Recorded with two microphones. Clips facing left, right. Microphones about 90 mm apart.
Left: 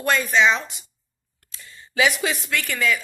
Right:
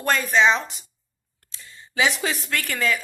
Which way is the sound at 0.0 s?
40° right (ahead or behind).